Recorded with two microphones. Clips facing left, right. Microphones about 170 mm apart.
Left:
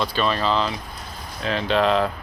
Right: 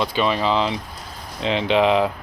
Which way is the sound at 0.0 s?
15° right (ahead or behind).